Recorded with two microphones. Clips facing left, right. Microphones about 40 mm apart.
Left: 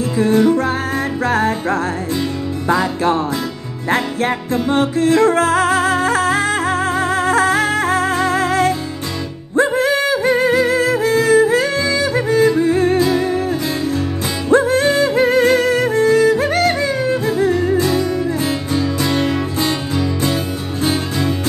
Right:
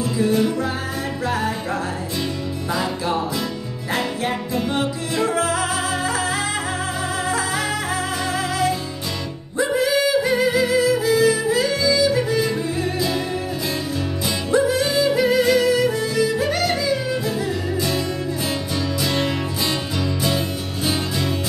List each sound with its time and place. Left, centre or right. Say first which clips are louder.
0.2 s music: left 7 dB; left
4.6 s music: left 8 dB; left
14.5 s music: left 6 dB; left
18.8 s music: left 5 dB; left